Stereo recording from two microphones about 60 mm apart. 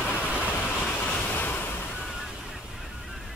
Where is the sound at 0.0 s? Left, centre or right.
Left.